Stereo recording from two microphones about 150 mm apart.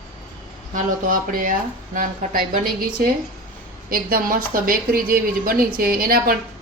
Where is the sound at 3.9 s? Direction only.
75° right (ahead or behind).